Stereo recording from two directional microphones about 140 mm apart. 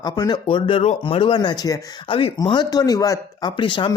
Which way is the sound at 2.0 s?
40° left (ahead or behind).